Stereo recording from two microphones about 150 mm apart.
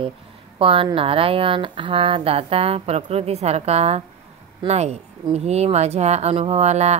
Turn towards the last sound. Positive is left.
turn(degrees=-50)  # may be behind; listen again after turning